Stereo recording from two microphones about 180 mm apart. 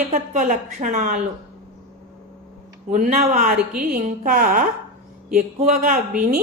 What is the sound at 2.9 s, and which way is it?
A woman's voice, 45° right (ahead or behind).